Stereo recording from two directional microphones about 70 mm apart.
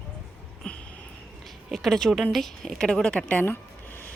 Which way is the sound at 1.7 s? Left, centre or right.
Centre.